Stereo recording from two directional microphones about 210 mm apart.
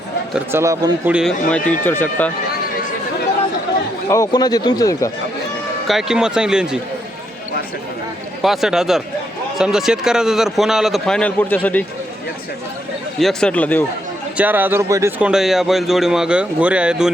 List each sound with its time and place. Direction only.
0.3 s speech: 15° right (ahead or behind)
1.1 s speech: centre (ahead or behind)
4.1 s speech: 15° left (ahead or behind)
5.9 s speech: centre (ahead or behind)
8.4 s speech: centre (ahead or behind)
13.1 s speech: centre (ahead or behind)
14.3 s speech: 10° right (ahead or behind)